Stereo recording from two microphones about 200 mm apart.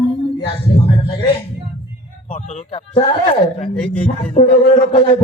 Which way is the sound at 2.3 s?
35° left (ahead or behind).